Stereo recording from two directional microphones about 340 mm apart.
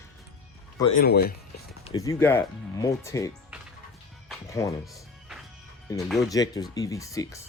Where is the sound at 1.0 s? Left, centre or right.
Left.